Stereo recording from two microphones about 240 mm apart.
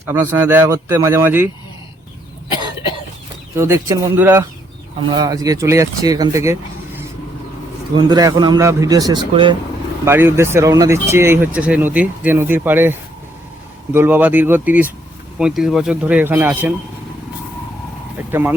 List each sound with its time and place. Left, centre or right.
0.0 s speech: centre
3.5 s speech: centre
10.1 s speech: centre
18.3 s speech: centre